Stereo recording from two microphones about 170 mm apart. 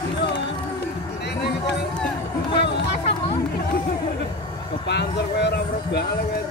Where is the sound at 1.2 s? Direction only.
75° left (ahead or behind).